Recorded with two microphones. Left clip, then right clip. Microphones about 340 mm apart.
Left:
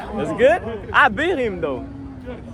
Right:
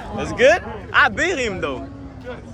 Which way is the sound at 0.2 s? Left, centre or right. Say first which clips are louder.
Right 1 dB; centre.